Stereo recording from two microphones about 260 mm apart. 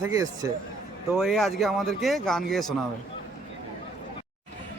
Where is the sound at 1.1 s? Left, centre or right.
Centre.